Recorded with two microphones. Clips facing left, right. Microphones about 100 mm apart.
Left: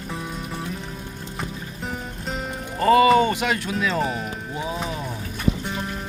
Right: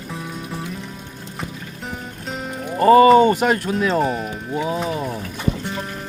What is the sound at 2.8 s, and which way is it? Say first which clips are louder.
Speech: right 5 dB; 35° right (ahead or behind).